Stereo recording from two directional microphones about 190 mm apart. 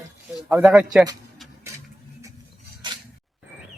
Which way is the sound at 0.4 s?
5° right (ahead or behind).